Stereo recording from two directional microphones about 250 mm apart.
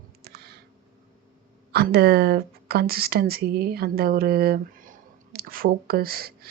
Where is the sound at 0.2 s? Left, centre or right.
Right.